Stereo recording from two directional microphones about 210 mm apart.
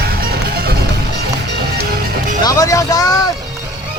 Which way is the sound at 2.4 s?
15° left (ahead or behind).